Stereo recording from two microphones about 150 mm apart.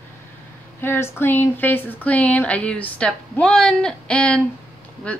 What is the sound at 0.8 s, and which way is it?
A woman's voice, 15° left (ahead or behind).